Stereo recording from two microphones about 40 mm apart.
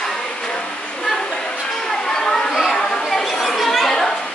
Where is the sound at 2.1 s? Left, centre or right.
Centre.